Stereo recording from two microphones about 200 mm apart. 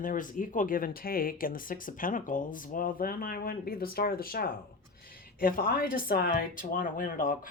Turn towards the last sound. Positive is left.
turn(degrees=45)  # may be behind; listen again after turning